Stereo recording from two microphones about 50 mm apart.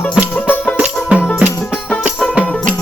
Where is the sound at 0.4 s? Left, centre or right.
Left.